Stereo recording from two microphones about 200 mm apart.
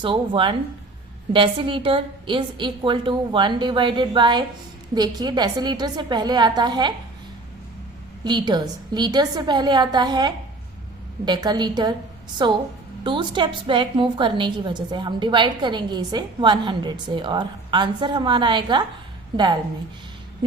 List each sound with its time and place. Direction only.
0.0 s a woman's voice: 25° right (ahead or behind)
8.2 s a woman's voice: 20° right (ahead or behind)